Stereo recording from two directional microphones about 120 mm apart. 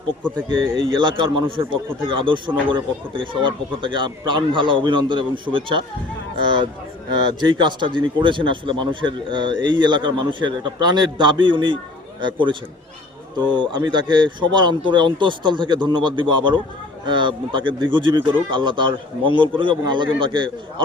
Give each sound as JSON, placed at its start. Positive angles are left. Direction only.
{"t": 0.4, "sound": "a man's voice", "side_deg": -40}